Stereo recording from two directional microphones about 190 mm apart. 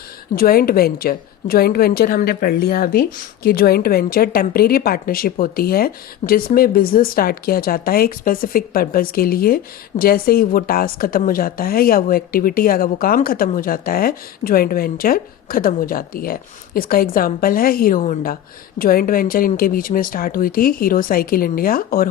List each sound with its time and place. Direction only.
0.3 s a woman's voice: 50° left (ahead or behind)